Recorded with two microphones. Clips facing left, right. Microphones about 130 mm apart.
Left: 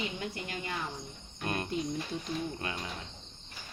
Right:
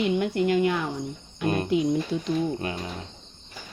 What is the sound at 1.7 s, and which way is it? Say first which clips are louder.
Speech: right 11 dB; 90° right.